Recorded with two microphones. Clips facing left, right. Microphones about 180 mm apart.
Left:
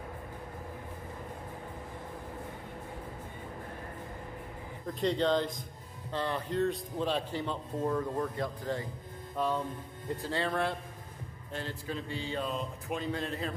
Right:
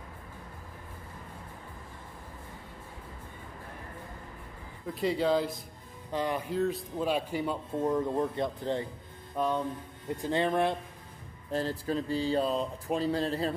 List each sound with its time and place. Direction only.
4.8 s speech: 5° right (ahead or behind); by 8.8 s 25° right (ahead or behind)
10.2 s speech: 20° right (ahead or behind)
11.5 s speech: 35° right (ahead or behind)